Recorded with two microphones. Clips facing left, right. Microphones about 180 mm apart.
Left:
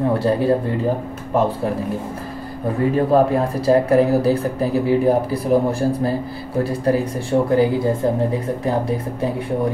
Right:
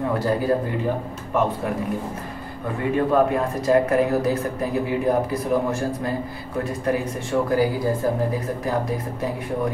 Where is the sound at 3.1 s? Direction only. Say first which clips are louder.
Left 2 dB; 35° left (ahead or behind).